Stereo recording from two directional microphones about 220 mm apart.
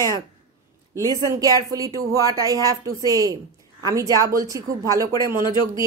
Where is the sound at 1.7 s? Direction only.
15° right (ahead or behind).